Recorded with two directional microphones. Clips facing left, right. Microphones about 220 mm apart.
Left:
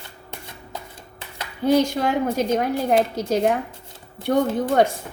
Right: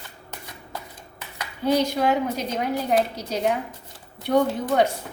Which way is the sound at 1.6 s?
50° left (ahead or behind).